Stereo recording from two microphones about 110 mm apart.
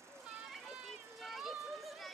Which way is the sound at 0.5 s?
Centre (ahead or behind).